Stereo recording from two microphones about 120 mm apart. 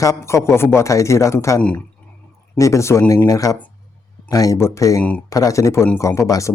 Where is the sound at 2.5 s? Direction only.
25° left (ahead or behind).